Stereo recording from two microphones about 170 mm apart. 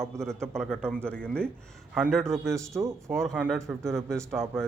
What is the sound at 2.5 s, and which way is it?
Speech, 15° right (ahead or behind).